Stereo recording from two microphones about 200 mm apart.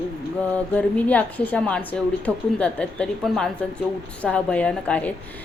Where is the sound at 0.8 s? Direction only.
5° left (ahead or behind).